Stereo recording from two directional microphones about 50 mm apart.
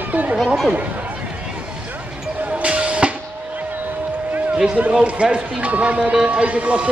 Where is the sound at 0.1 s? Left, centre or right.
Right.